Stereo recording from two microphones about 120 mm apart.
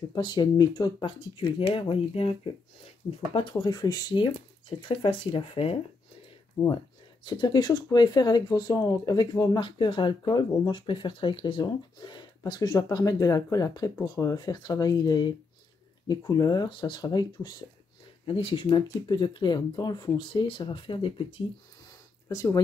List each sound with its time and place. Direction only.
0.1 s speech: 35° left (ahead or behind)
3.3 s speech: 35° left (ahead or behind)
6.6 s speech: 35° left (ahead or behind)
18.2 s speech: 45° left (ahead or behind)
22.3 s speech: 25° left (ahead or behind)